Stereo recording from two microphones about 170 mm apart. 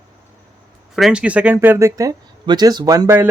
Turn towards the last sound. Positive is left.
turn(degrees=-15)  # may be behind; listen again after turning